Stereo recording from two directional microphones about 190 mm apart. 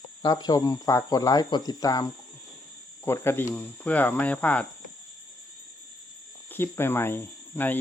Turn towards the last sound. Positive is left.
turn(degrees=10)  # may be behind; listen again after turning